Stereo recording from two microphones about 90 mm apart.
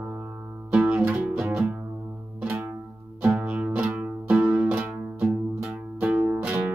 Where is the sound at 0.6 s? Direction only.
10° right (ahead or behind).